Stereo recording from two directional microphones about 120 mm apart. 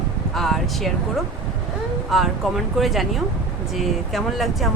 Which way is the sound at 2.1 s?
Centre (ahead or behind).